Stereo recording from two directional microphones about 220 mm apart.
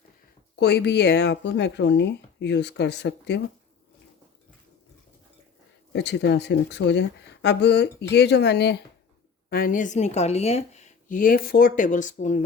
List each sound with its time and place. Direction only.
0.6 s speech: 50° left (ahead or behind)
5.9 s a woman's voice: 50° left (ahead or behind); by 12.4 s 35° left (ahead or behind)